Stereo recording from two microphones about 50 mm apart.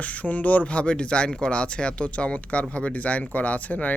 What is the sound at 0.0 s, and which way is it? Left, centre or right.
Speech, left.